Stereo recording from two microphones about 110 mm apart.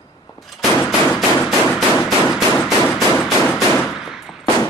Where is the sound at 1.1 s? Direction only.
15° left (ahead or behind).